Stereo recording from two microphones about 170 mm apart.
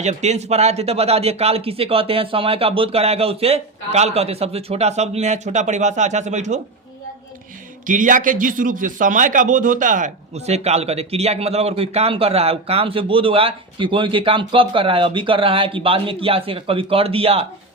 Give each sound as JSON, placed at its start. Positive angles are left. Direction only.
{"t": 0.0, "sound": "a man's voice", "side_deg": -40}
{"t": 7.9, "sound": "a man's voice", "side_deg": -50}